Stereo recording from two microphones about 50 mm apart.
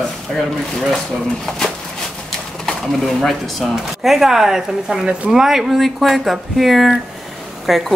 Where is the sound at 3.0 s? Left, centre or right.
Centre.